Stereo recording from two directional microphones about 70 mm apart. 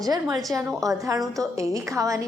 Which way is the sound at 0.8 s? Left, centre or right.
Right.